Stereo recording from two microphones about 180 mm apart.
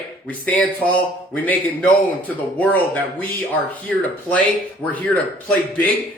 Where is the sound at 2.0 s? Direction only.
10° left (ahead or behind).